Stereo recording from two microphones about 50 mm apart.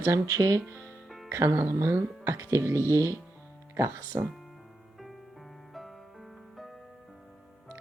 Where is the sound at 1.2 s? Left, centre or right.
Right.